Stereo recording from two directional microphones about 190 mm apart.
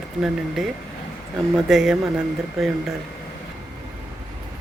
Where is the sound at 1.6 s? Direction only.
Centre (ahead or behind).